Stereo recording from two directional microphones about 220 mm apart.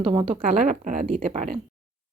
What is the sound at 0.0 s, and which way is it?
Speech, 20° right (ahead or behind).